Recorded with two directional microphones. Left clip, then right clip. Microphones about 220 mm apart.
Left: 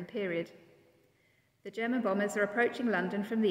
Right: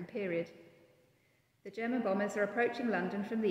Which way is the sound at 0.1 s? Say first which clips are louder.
Left 2 dB; 35° left (ahead or behind).